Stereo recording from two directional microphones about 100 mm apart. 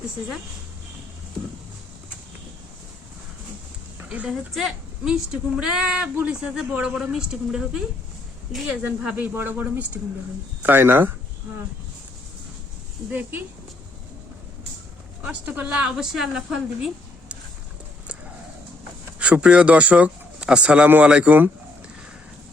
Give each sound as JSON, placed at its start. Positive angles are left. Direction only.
{"t": 4.1, "sound": "a woman's voice", "side_deg": -15}
{"t": 9.0, "sound": "a woman's voice", "side_deg": -20}
{"t": 13.1, "sound": "a woman's voice", "side_deg": -20}
{"t": 15.2, "sound": "a woman's voice", "side_deg": -15}
{"t": 19.2, "sound": "a woman's voice", "side_deg": -10}